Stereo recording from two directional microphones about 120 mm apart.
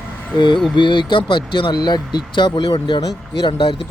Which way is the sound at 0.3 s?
40° left (ahead or behind).